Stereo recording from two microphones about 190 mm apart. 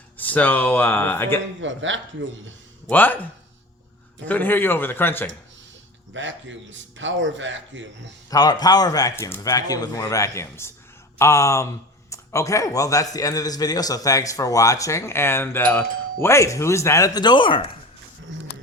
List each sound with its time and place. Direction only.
0.2 s speech: 10° left (ahead or behind)
1.6 s speech: 80° right
2.8 s speech: 10° left (ahead or behind)
4.3 s speech: 10° left (ahead or behind)
6.1 s a man's voice: 75° right (ahead or behind)
8.3 s speech: 20° left (ahead or behind)